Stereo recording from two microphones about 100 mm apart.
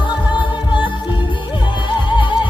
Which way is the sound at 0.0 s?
50° left (ahead or behind).